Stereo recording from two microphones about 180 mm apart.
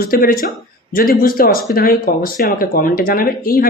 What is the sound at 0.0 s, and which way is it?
Speech, 55° left (ahead or behind).